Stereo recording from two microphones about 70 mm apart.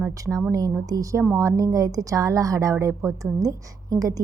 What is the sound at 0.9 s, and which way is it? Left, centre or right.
A woman's voice, right.